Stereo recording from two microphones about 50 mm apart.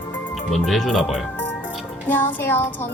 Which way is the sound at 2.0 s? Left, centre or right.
Left.